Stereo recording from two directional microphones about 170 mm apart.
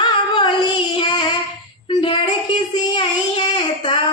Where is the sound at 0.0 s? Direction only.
25° left (ahead or behind).